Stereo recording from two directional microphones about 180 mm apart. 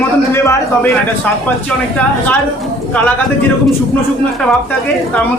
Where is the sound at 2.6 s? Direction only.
5° left (ahead or behind).